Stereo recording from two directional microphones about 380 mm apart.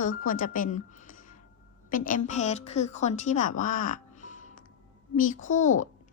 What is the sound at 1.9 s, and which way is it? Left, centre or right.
A woman's voice, centre.